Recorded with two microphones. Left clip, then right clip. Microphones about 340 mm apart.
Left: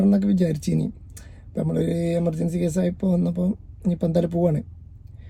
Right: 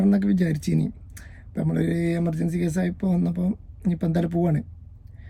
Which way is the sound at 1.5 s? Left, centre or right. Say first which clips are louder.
Left 2 dB; left.